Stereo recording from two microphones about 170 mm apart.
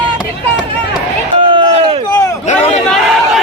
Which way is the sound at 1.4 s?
30° right (ahead or behind).